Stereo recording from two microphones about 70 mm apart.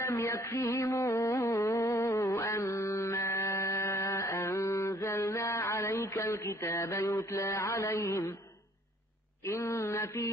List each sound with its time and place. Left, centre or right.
0.1 s music: left
3.7 s a sound: left
4.0 s mantra: left
9.8 s mantra: left